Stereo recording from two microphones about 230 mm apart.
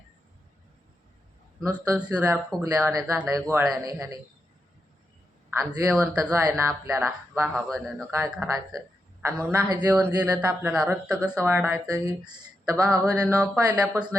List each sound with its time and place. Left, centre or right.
1.6 s speech: centre
5.5 s a man's voice: centre
7.5 s a man's voice: centre